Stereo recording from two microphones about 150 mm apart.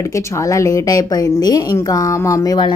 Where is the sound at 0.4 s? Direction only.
20° left (ahead or behind).